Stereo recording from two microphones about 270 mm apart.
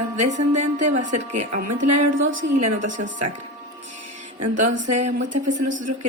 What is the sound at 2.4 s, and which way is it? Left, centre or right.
Speech, right.